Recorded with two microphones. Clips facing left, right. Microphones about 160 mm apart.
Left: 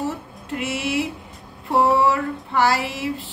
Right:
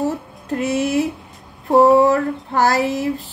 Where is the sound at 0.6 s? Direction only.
45° right (ahead or behind).